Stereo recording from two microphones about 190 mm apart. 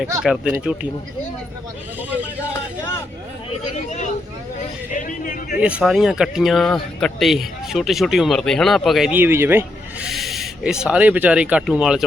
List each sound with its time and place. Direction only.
0.2 s speech: 5° right (ahead or behind)
2.4 s speech: 15° left (ahead or behind)
3.8 s speech: 40° left (ahead or behind)
5.5 s speech: 5° right (ahead or behind)
10.1 s speech: centre (ahead or behind)